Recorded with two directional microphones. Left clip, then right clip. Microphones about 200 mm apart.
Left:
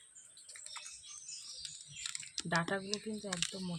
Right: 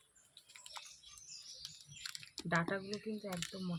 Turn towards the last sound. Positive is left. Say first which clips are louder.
# left 4 dB
turn(degrees=-40)  # may be behind; listen again after turning